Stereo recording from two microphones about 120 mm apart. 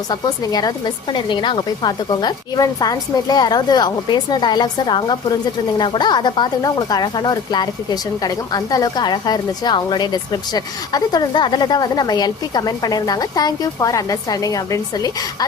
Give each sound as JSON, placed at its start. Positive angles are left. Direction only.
{"t": 0.1, "sound": "a woman's voice", "side_deg": 35}